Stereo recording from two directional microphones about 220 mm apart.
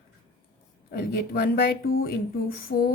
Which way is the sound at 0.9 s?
45° left (ahead or behind).